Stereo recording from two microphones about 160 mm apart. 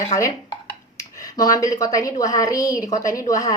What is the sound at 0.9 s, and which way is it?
Speech, 20° left (ahead or behind).